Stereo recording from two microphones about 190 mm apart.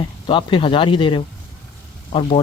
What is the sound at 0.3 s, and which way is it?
Speech, 25° left (ahead or behind).